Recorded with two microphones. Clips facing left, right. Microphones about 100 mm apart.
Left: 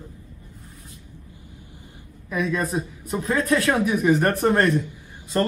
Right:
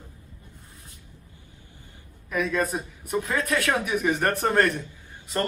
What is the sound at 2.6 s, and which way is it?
A man's voice, 30° left (ahead or behind).